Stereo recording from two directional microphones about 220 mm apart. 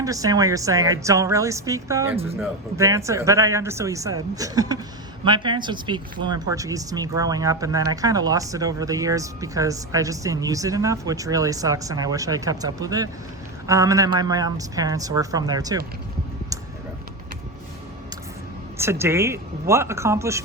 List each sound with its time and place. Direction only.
0.0 s speech: 15° right (ahead or behind)
18.8 s speech: 10° right (ahead or behind)